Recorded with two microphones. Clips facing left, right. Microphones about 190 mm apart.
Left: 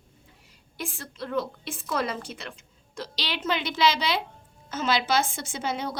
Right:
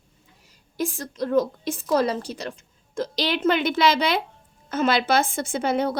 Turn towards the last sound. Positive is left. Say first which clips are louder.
# right 8 dB
turn(degrees=-55)  # may be behind; listen again after turning